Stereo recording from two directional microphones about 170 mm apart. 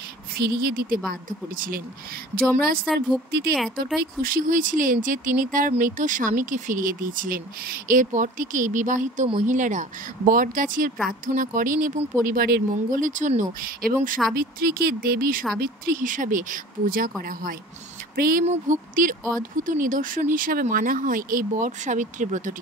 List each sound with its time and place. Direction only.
0.4 s speech: 60° right (ahead or behind)
2.5 s speech: 60° right (ahead or behind)
3.3 s speech: 70° right (ahead or behind)
3.5 s speech: centre (ahead or behind)
4.0 s speech: 60° right (ahead or behind)
12.7 s speech: 50° right (ahead or behind)
18.1 s speech: 60° right (ahead or behind)
18.4 s speech: 45° right (ahead or behind)